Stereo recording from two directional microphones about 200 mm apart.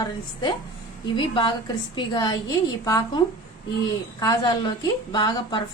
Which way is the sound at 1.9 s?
20° left (ahead or behind).